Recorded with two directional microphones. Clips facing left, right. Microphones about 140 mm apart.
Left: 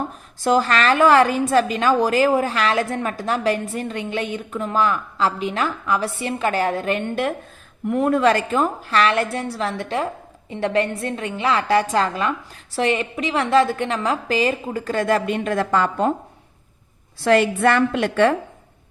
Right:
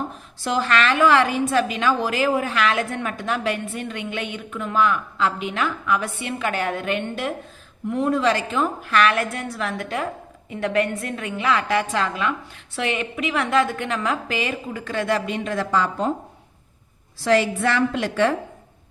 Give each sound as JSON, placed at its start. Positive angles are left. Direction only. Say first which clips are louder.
{"t": 0.4, "sound": "a woman's voice", "louder": "left 3 dB", "side_deg": 40}
{"t": 7.9, "sound": "a woman's voice", "louder": "left 3 dB", "side_deg": 55}
{"t": 8.8, "sound": "a woman's voice", "louder": "left 1 dB", "side_deg": 30}
{"t": 17.2, "sound": "a woman's voice", "louder": "left 3 dB", "side_deg": 55}